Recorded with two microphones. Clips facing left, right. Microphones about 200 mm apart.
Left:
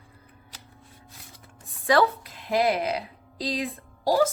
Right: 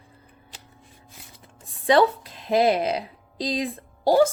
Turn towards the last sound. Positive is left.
turn(degrees=-30)  # may be behind; listen again after turning